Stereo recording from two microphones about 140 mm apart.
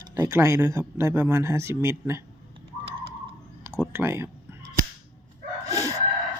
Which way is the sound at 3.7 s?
15° right (ahead or behind).